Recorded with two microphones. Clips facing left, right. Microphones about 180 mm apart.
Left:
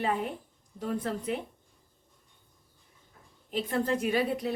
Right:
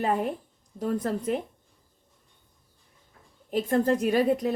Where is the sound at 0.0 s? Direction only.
45° right (ahead or behind).